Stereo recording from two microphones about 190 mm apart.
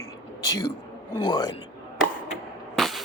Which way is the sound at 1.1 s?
25° left (ahead or behind).